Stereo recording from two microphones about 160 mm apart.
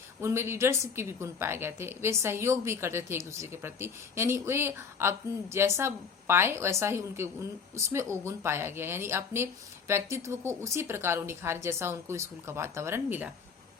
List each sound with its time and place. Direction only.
0.2 s a woman's voice: 15° right (ahead or behind)